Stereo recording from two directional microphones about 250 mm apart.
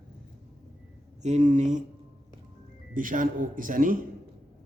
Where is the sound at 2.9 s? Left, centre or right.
Right.